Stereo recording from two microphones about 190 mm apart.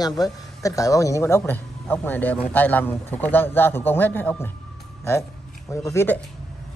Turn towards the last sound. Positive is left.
turn(degrees=10)  # may be behind; listen again after turning